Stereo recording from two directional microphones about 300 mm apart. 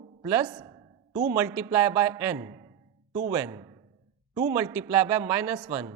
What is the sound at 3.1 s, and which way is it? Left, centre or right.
Speech, right.